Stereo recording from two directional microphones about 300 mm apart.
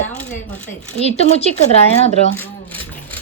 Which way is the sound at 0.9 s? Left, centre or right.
Left.